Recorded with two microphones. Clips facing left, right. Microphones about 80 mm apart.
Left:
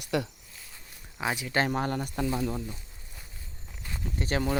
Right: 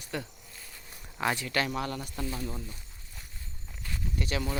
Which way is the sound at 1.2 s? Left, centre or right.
Centre.